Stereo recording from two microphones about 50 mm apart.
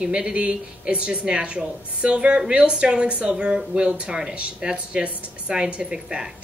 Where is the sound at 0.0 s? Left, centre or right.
Centre.